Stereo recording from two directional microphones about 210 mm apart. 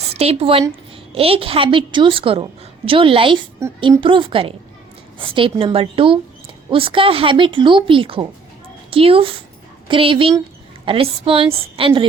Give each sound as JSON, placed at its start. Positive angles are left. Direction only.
{"t": 0.1, "sound": "a woman's voice", "side_deg": -30}